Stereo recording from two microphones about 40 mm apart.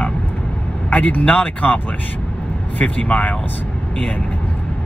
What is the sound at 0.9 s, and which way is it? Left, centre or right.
Speech, left.